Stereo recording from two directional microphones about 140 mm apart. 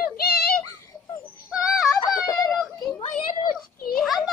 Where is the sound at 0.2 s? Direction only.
90° left.